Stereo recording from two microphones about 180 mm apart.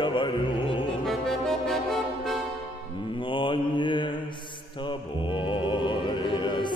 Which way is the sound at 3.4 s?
25° left (ahead or behind).